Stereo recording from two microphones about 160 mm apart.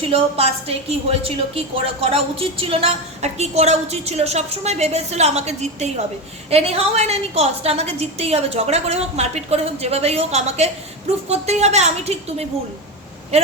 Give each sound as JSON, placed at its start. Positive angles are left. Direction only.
{"t": 0.1, "sound": "a woman's voice", "side_deg": -35}